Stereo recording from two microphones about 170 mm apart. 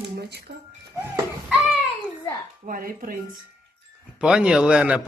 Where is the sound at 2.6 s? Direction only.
55° right (ahead or behind).